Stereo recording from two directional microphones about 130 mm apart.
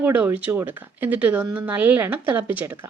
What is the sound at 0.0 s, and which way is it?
Speech, 15° right (ahead or behind).